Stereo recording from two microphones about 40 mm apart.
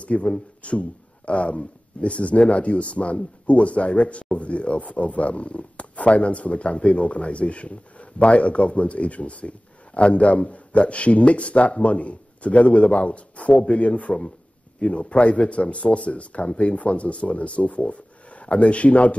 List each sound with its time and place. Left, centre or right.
0.0 s speech: left